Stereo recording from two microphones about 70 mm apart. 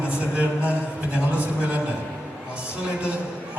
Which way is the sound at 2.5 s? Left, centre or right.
Centre.